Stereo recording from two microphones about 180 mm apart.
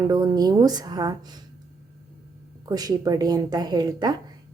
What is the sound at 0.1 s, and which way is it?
A woman's voice, 20° right (ahead or behind).